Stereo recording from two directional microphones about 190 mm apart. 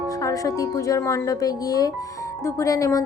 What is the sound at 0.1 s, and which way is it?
Music, 20° left (ahead or behind).